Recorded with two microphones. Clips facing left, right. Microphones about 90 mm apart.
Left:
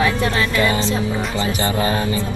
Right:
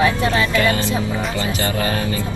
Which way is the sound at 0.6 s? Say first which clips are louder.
Even; 20° left (ahead or behind).